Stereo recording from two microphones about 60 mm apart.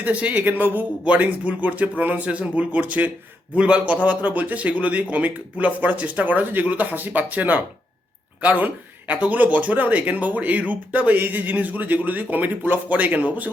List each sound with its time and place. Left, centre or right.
0.0 s speech: right